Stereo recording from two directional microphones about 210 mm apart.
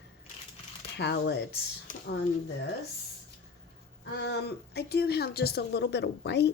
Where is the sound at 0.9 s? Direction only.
50° left (ahead or behind).